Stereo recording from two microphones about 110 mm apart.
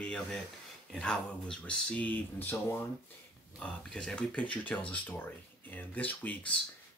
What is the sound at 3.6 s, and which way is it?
Speech, 5° left (ahead or behind).